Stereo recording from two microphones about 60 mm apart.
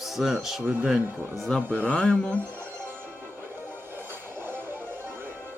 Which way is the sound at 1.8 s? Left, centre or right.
Centre.